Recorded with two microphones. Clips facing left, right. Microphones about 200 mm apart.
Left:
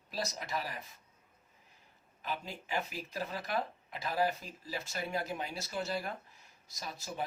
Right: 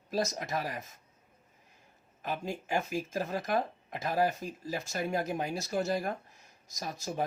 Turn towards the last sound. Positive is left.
turn(degrees=-45)  # may be behind; listen again after turning